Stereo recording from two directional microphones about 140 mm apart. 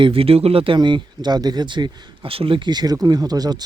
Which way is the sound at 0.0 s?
40° right (ahead or behind).